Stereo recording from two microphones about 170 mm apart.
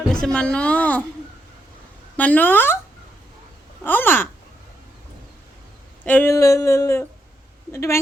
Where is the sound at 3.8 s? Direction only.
10° left (ahead or behind).